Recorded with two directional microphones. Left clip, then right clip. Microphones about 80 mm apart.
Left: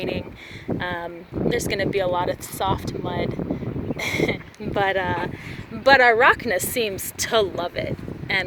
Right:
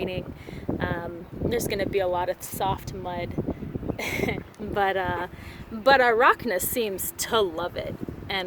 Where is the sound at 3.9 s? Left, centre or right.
Right.